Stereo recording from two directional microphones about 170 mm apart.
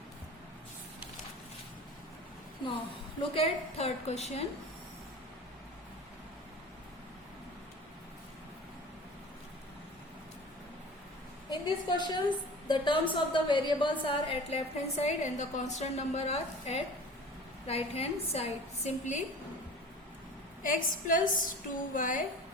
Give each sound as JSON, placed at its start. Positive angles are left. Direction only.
{"t": 3.2, "sound": "a woman's voice", "side_deg": 35}
{"t": 11.5, "sound": "a woman's voice", "side_deg": 25}
{"t": 20.6, "sound": "a woman's voice", "side_deg": 50}